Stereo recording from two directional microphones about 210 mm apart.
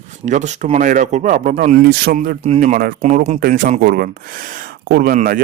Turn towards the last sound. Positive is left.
turn(degrees=-45)  # may be behind; listen again after turning